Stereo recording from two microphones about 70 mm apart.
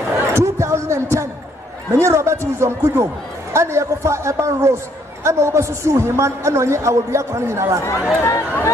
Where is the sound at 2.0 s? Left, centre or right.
Right.